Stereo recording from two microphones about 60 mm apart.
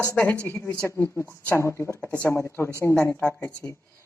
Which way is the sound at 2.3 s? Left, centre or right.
Left.